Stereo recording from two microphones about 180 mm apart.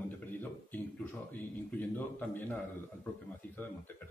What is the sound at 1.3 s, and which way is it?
Speech, 10° left (ahead or behind).